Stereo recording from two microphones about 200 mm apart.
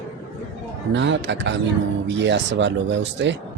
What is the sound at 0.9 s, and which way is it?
Speech, 65° right (ahead or behind).